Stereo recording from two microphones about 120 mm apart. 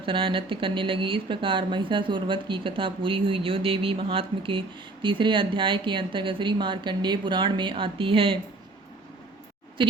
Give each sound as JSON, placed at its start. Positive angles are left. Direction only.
{"t": 0.0, "sound": "speech", "side_deg": -45}